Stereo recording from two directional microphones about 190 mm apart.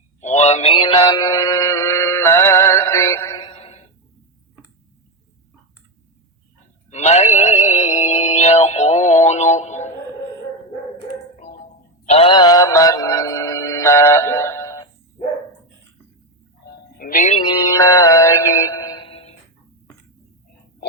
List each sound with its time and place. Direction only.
0.2 s synthetic singing: 35° left (ahead or behind)
6.9 s music: 35° left (ahead or behind)
12.0 s music: 30° left (ahead or behind); by 14.8 s 15° left (ahead or behind)
16.6 s music: 50° left (ahead or behind)
17.4 s mantra: 20° left (ahead or behind)